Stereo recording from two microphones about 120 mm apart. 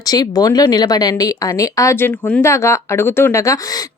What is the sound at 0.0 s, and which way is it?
Speech, 30° left (ahead or behind).